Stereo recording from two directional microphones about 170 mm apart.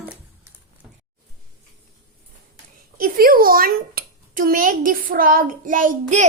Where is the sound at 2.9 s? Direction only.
55° right (ahead or behind).